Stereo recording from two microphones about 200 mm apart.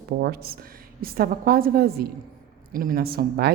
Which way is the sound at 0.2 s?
50° right (ahead or behind).